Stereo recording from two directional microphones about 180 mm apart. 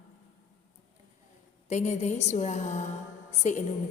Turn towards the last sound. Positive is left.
turn(degrees=40)  # may be behind; listen again after turning